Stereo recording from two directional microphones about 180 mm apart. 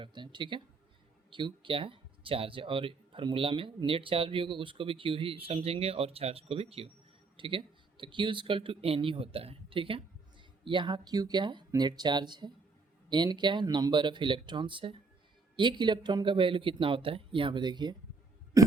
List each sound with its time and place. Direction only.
0.0 s speech: 25° right (ahead or behind)
18.5 s burping: 15° right (ahead or behind)